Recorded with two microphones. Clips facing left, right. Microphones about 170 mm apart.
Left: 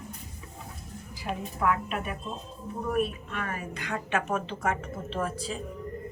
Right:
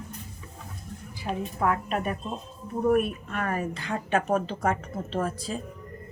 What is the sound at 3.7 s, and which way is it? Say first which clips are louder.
A woman's voice: right 3 dB; 30° right (ahead or behind).